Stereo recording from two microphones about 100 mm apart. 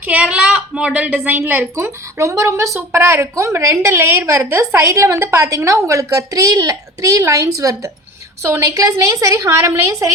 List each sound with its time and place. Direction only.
0.0 s a woman's voice: 15° right (ahead or behind); by 10.1 s 30° right (ahead or behind)